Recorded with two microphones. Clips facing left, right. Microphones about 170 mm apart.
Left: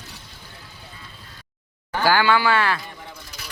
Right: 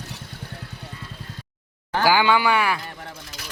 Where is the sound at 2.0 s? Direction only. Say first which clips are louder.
Even; 15° right (ahead or behind).